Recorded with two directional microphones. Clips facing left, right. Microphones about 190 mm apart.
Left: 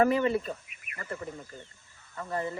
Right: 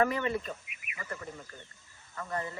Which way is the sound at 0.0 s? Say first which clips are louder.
Left 5 dB; 30° left (ahead or behind).